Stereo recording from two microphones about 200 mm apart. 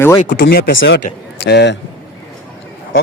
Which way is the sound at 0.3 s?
60° left (ahead or behind).